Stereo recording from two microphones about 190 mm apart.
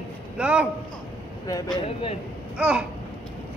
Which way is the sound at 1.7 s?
30° left (ahead or behind).